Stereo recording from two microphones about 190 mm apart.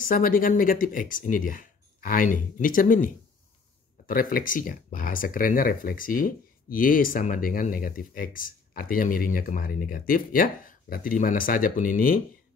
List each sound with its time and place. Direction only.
0.1 s speech: 50° left (ahead or behind)